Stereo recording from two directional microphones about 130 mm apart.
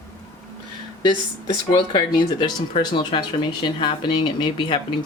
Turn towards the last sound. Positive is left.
turn(degrees=40)  # may be behind; listen again after turning